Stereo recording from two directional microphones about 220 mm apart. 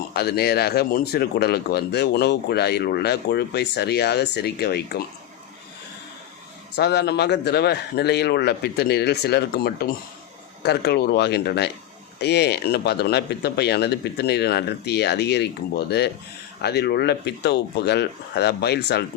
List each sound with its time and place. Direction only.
0.1 s speech: 45° left (ahead or behind)
6.7 s speech: 50° left (ahead or behind)
16.6 s speech: 50° left (ahead or behind)